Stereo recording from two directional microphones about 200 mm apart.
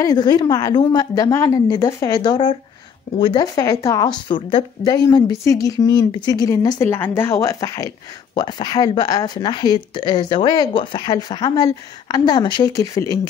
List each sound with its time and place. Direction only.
0.0 s a woman's voice: 20° left (ahead or behind)